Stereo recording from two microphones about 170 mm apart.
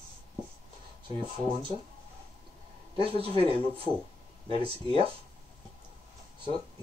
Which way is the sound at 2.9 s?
35° right (ahead or behind).